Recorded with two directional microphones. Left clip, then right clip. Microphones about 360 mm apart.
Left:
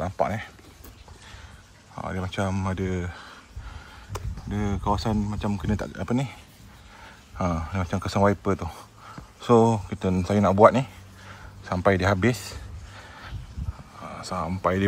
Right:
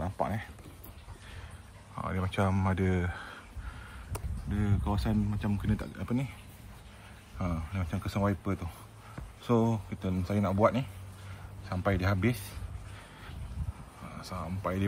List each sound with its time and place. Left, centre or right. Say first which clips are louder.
0.0 s a sound: left 8 dB; left
2.0 s speech: left 3 dB; centre
4.5 s speech: left 9 dB; centre
7.3 s a man's voice: left 10 dB; centre
14.0 s speech: left 10 dB; centre